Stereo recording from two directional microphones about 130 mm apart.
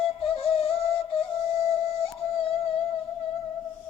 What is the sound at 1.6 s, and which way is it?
Music, 50° left (ahead or behind).